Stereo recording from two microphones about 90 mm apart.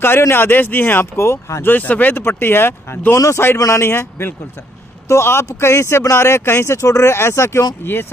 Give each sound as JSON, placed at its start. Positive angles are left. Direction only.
{"t": 0.0, "sound": "speech", "side_deg": 25}